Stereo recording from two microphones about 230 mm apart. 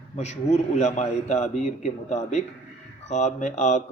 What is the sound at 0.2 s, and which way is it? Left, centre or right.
Speech, left.